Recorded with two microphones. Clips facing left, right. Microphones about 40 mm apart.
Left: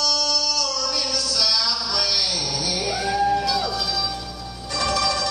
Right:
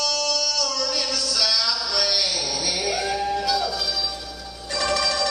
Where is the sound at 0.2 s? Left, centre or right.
Right.